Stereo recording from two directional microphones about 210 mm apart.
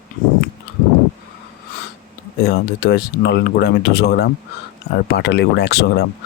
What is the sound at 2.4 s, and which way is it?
Speech, 50° left (ahead or behind).